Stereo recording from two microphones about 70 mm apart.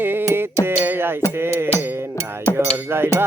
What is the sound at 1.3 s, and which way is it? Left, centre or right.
Speech, right.